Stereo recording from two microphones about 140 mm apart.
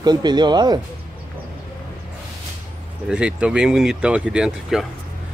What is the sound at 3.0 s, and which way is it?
Speech, 5° right (ahead or behind).